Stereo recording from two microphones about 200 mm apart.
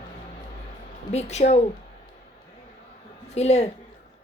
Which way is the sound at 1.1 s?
35° left (ahead or behind).